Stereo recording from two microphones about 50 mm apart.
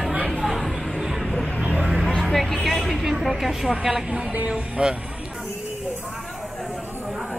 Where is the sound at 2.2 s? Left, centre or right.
Centre.